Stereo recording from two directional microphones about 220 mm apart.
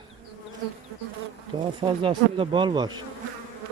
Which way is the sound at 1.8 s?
25° right (ahead or behind).